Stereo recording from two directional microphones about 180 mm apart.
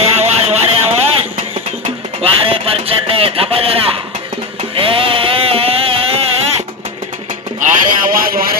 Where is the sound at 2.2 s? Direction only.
30° right (ahead or behind).